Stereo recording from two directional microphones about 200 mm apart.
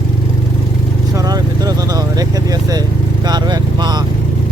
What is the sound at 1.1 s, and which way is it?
Vehicle, 20° right (ahead or behind).